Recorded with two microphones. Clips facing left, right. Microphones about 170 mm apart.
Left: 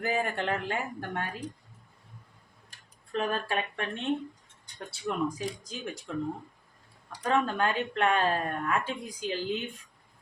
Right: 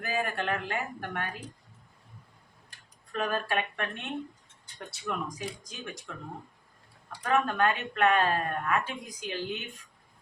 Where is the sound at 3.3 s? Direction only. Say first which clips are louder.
Even; 30° left (ahead or behind).